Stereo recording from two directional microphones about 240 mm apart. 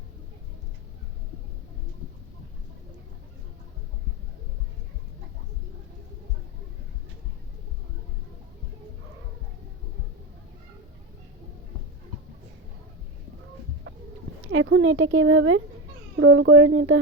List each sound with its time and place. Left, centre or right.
14.4 s speech: right